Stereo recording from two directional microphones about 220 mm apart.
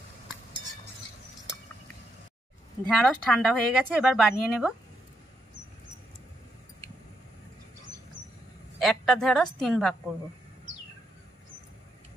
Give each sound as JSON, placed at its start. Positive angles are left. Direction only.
{"t": 2.9, "sound": "a woman's voice", "side_deg": 0}
{"t": 8.7, "sound": "a woman's voice", "side_deg": 0}